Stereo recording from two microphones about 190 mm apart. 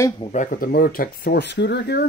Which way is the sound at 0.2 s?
40° left (ahead or behind).